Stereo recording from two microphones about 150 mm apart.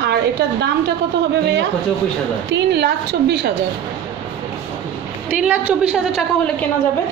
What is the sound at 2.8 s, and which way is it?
Speech, 90° right.